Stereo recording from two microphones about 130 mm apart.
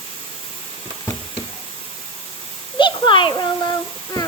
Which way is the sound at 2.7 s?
40° left (ahead or behind).